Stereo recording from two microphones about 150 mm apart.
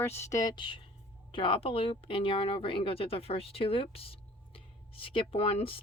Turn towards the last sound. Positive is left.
turn(degrees=40)  # may be behind; listen again after turning